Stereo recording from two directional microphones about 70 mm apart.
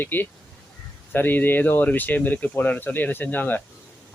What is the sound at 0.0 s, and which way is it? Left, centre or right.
Speech, left.